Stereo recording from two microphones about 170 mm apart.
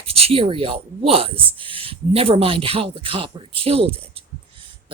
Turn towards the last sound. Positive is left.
turn(degrees=-35)  # may be behind; listen again after turning